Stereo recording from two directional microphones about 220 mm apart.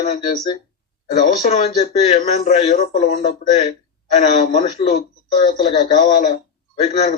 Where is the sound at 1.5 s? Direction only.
30° left (ahead or behind).